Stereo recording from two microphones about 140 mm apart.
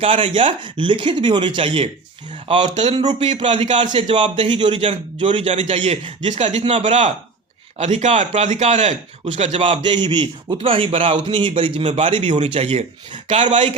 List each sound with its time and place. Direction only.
0.0 s a man's voice: 40° right (ahead or behind)
2.8 s a man's voice: 30° right (ahead or behind)
3.2 s a man's voice: 50° right (ahead or behind)
6.2 s a man's voice: 55° right (ahead or behind)